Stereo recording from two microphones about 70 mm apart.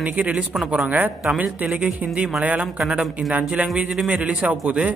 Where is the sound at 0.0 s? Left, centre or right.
Centre.